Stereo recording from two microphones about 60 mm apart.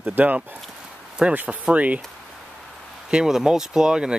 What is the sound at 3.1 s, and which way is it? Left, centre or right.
Speech, centre.